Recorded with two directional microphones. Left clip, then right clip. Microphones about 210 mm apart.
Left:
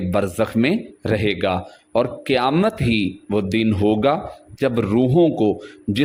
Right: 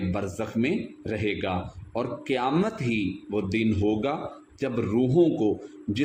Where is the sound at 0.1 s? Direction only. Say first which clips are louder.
Left 15 dB; 45° left (ahead or behind).